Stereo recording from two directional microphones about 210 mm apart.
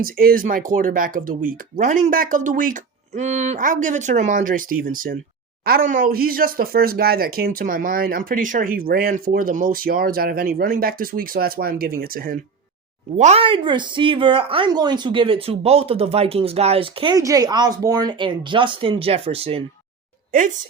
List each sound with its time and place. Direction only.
0.0 s speech: 45° right (ahead or behind)
13.1 s speech: 30° right (ahead or behind)
20.3 s speech: 40° right (ahead or behind)